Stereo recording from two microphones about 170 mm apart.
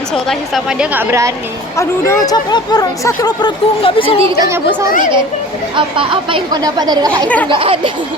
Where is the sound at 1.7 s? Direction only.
15° left (ahead or behind).